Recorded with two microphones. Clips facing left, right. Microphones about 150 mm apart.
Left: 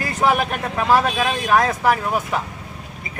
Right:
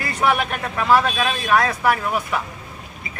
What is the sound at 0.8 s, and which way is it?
A man's voice, 15° left (ahead or behind).